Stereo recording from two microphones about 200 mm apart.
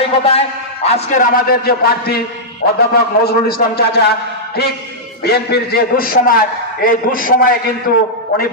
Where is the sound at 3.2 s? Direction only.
50° left (ahead or behind).